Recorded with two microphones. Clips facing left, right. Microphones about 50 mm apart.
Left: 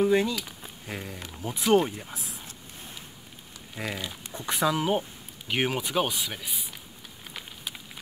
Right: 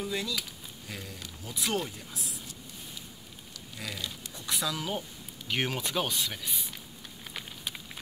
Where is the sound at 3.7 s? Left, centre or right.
Left.